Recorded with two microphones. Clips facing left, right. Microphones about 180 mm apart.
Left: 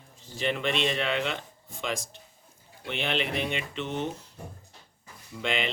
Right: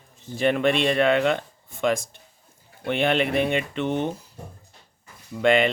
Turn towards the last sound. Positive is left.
turn(degrees=-55)  # may be behind; listen again after turning